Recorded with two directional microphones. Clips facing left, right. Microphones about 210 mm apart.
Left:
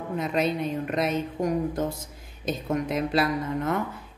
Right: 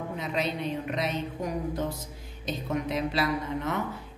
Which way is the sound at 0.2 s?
50° left (ahead or behind).